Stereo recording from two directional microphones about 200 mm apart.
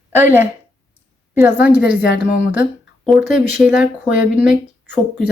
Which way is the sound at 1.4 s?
10° right (ahead or behind).